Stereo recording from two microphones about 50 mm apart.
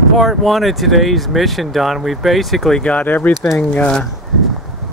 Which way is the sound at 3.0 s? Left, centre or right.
Left.